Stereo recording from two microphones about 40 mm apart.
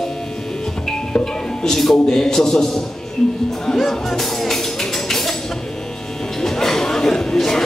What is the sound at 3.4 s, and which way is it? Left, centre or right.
Music, centre.